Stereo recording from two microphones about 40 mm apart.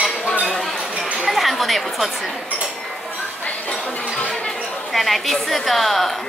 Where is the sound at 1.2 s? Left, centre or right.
Centre.